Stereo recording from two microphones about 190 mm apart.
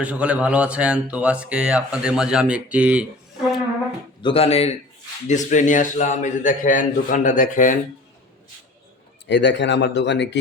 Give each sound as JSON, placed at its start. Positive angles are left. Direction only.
{"t": 0.0, "sound": "speech", "side_deg": -5}
{"t": 4.2, "sound": "a man's voice", "side_deg": 30}
{"t": 9.2, "sound": "a man's voice", "side_deg": 65}